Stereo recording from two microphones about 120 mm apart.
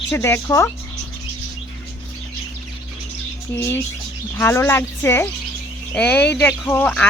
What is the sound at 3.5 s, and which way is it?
A woman's voice, 20° left (ahead or behind).